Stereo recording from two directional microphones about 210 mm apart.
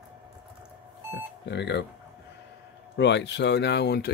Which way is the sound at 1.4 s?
55° left (ahead or behind).